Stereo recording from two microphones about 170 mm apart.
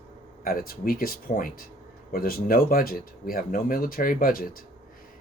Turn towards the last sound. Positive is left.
turn(degrees=55)  # may be behind; listen again after turning